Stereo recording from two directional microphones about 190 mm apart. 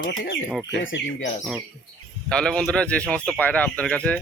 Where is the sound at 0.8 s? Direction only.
80° left.